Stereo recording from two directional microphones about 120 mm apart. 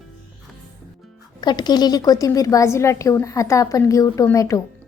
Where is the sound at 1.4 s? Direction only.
35° left (ahead or behind).